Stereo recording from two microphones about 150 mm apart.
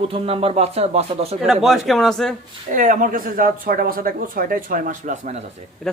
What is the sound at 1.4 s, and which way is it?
Speech, centre (ahead or behind).